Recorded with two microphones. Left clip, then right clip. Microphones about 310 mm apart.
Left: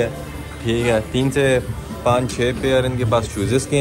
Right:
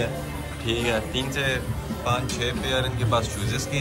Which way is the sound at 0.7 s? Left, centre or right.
Centre.